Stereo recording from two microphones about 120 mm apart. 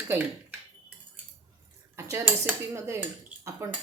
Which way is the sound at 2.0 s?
20° right (ahead or behind).